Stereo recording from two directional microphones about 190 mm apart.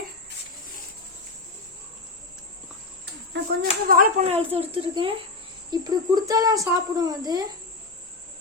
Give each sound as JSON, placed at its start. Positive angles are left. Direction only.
{"t": 3.6, "sound": "speech", "side_deg": -50}
{"t": 4.3, "sound": "speech", "side_deg": -30}